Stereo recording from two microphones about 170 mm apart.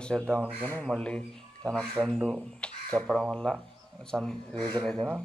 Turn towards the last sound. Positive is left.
turn(degrees=5)  # may be behind; listen again after turning